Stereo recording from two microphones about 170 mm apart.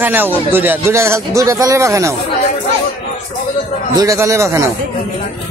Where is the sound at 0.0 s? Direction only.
10° right (ahead or behind).